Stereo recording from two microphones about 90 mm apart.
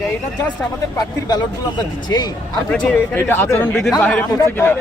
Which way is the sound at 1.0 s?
45° left (ahead or behind).